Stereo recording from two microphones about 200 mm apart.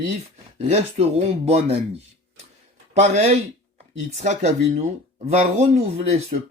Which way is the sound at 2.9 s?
35° right (ahead or behind).